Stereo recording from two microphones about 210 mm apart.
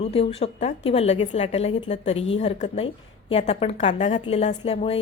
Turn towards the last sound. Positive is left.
turn(degrees=25)  # may be behind; listen again after turning